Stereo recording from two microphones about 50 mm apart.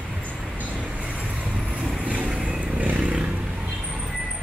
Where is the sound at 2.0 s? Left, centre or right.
Right.